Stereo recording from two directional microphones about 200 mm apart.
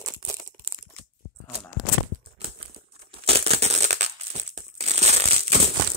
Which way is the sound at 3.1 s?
30° right (ahead or behind).